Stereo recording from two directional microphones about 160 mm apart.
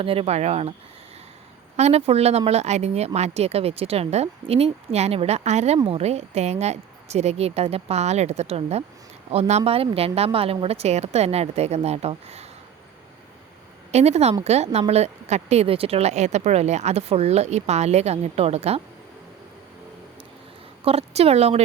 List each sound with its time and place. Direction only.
0.0 s speech: 35° right (ahead or behind)
1.7 s a woman's voice: 40° right (ahead or behind)
13.9 s a woman's voice: 40° right (ahead or behind)
20.8 s speech: 40° right (ahead or behind)